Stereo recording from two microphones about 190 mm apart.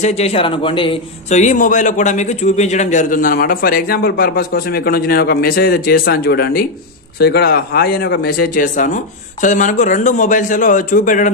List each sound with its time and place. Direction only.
0.0 s a man's voice: 35° left (ahead or behind)